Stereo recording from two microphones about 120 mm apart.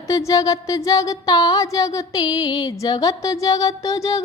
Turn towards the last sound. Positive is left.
turn(degrees=25)  # may be behind; listen again after turning